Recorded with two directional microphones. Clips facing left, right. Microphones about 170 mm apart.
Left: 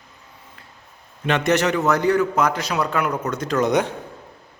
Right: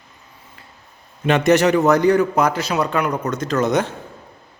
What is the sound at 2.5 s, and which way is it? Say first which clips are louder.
Speech: right 2 dB; 5° right (ahead or behind).